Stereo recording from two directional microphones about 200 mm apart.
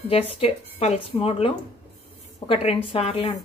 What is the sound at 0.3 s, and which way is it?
A woman's voice, 30° left (ahead or behind).